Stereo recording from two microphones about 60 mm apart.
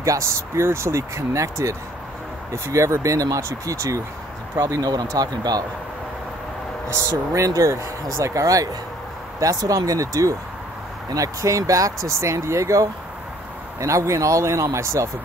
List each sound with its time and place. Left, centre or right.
0.0 s speech: right
4.6 s speech: right
6.9 s speech: right
9.4 s speech: right